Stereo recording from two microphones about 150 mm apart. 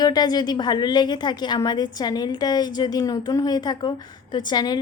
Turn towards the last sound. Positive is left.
turn(degrees=30)  # may be behind; listen again after turning